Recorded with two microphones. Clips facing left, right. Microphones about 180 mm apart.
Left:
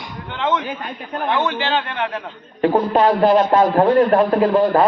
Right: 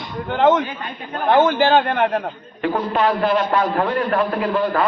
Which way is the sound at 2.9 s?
35° left (ahead or behind).